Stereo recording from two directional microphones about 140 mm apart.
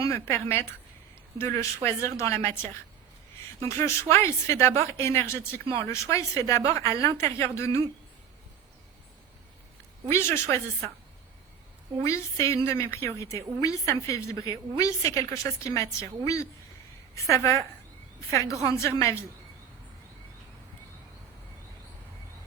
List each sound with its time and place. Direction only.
0.0 s a woman's voice: 15° left (ahead or behind)
3.7 s a woman's voice: 20° left (ahead or behind)
10.1 s a woman's voice: 15° left (ahead or behind)
12.0 s a woman's voice: 20° left (ahead or behind)